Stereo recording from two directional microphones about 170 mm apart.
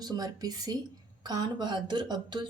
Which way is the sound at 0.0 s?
25° right (ahead or behind).